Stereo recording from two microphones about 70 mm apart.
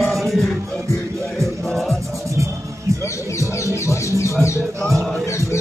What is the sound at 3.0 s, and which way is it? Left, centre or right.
Bird, left.